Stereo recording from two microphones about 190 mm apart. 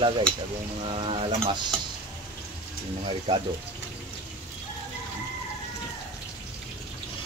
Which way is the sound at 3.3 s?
30° right (ahead or behind).